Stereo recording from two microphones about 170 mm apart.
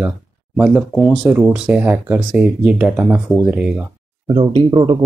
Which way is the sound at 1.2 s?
10° right (ahead or behind).